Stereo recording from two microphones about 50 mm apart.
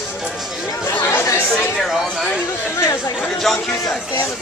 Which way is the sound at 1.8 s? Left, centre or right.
Centre.